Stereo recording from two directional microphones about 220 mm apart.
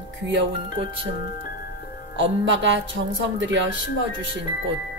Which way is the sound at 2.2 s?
55° right (ahead or behind).